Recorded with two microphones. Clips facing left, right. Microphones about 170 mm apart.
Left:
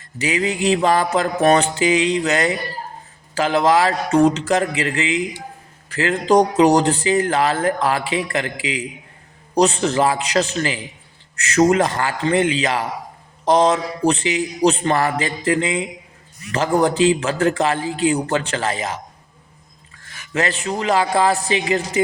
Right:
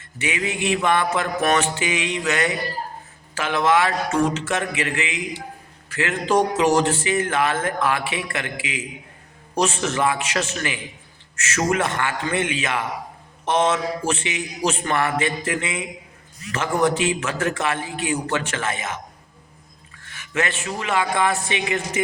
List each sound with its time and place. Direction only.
0.2 s speech: 35° left (ahead or behind)
20.0 s speech: 35° left (ahead or behind)